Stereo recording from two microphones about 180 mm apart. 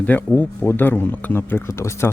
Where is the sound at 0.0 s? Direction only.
10° left (ahead or behind).